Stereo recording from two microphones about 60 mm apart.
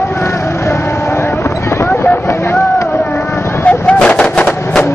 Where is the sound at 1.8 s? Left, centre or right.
Left.